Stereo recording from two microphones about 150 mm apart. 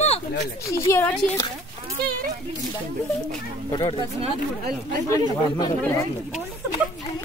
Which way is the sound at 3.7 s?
30° left (ahead or behind).